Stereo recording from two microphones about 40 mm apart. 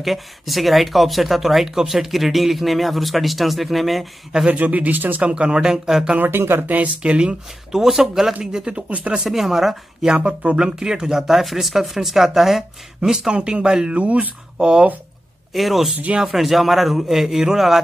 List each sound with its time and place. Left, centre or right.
0.0 s speech: centre
4.5 s speech: right
5.2 s speech: right
6.2 s speech: right
6.6 s speech: right
7.0 s speech: right
7.7 s speech: centre
8.6 s speech: right
9.2 s speech: centre
10.0 s speech: right
10.6 s speech: centre
13.9 s speech: right
14.6 s speech: right
15.5 s speech: centre